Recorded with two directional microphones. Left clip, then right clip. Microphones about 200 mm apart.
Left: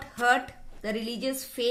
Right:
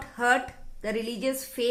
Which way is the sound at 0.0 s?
35° right (ahead or behind).